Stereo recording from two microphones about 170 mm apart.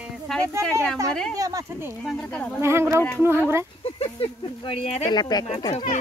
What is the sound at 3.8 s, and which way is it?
Speech, 35° left (ahead or behind).